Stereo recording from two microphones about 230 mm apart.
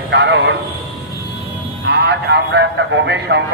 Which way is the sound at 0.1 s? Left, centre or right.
Right.